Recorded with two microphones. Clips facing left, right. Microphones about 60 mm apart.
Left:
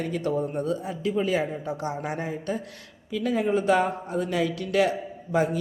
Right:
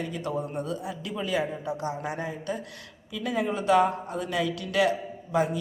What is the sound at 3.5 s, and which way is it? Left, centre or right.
A woman's voice, left.